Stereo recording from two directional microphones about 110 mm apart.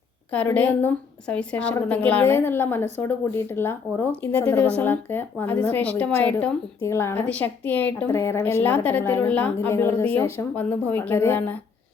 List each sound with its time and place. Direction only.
0.5 s a woman's voice: 15° left (ahead or behind)
8.1 s a woman's voice: 25° left (ahead or behind)
9.6 s a woman's voice: 25° left (ahead or behind)